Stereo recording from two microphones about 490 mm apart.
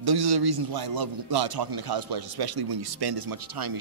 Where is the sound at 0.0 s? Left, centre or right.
Right.